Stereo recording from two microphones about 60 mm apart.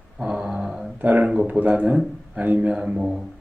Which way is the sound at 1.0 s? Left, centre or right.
Right.